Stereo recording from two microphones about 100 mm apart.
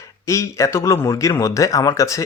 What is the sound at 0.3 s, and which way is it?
Speech, 30° left (ahead or behind).